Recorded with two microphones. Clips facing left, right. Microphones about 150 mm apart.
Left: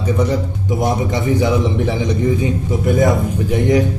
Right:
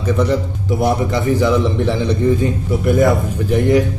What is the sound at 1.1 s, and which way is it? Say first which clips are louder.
A man's voice: right 1 dB; 15° left (ahead or behind).